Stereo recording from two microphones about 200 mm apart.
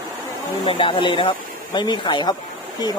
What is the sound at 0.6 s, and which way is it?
Speech, 25° left (ahead or behind).